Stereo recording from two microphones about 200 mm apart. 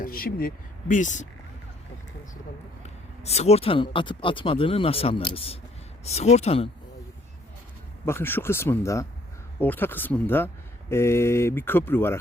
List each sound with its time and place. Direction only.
0.0 s speech: 50° left (ahead or behind)
2.8 s speech: 30° left (ahead or behind)
8.0 s speech: 10° left (ahead or behind)